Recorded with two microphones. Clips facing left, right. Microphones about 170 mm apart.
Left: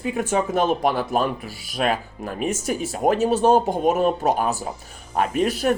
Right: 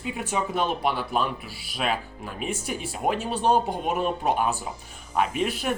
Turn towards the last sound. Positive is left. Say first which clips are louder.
# left 5 dB
turn(degrees=40)  # may be behind; listen again after turning